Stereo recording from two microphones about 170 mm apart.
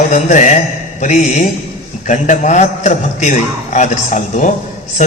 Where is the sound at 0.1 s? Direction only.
45° left (ahead or behind).